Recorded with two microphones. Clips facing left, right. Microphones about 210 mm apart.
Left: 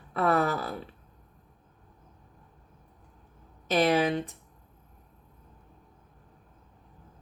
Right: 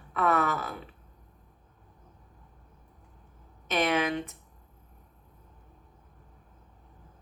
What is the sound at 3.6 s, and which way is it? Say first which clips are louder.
Speech: left 3 dB; 35° left (ahead or behind).